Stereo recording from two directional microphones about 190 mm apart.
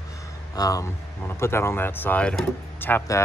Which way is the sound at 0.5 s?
20° left (ahead or behind).